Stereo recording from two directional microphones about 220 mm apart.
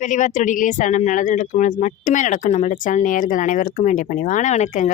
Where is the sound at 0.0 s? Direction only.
35° left (ahead or behind).